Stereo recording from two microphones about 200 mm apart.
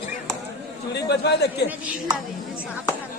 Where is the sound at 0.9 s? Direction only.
55° left (ahead or behind).